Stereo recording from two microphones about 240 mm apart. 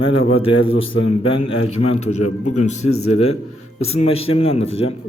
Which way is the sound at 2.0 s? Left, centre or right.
Left.